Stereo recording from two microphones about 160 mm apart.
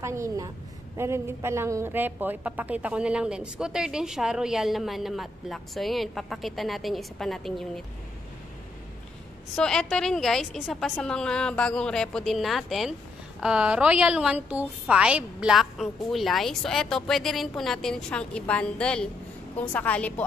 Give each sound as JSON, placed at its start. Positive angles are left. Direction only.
{"t": 0.0, "sound": "a woman's voice", "side_deg": -20}
{"t": 9.6, "sound": "a woman's voice", "side_deg": 5}